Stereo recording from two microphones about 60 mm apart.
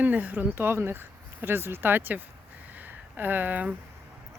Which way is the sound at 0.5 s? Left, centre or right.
Right.